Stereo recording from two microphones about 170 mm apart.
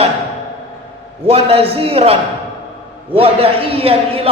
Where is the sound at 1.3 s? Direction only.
35° right (ahead or behind).